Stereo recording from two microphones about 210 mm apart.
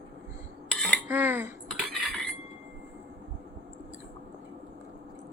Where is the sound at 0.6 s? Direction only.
5° left (ahead or behind).